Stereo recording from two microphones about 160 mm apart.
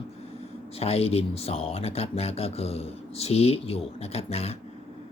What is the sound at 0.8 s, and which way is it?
Speech, 40° left (ahead or behind).